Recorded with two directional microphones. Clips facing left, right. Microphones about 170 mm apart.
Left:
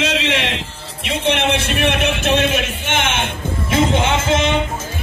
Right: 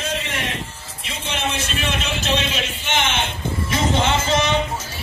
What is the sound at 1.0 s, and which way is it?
A man's voice, 65° left (ahead or behind).